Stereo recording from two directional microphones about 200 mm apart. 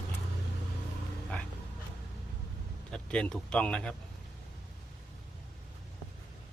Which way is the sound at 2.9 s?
5° left (ahead or behind).